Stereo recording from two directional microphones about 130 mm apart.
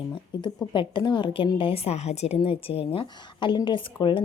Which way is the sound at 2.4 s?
45° left (ahead or behind).